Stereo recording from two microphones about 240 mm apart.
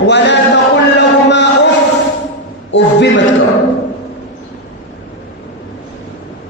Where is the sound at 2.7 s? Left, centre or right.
Left.